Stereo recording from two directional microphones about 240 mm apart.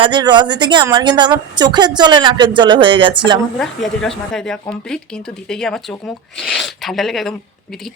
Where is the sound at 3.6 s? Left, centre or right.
Centre.